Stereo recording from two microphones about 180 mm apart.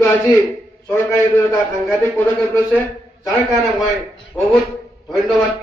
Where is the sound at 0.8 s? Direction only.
15° left (ahead or behind).